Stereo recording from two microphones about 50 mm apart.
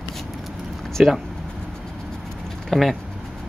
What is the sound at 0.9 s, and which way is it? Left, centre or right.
Speech, centre.